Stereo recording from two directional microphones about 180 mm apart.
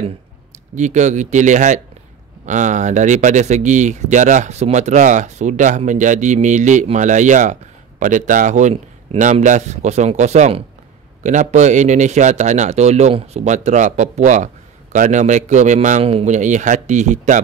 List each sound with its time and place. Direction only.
0.7 s a man's voice: 40° right (ahead or behind)